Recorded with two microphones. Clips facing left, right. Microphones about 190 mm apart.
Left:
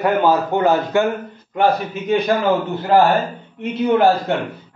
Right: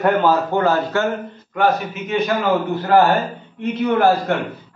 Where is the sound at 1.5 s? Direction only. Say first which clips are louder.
Left 1 dB; 30° left (ahead or behind).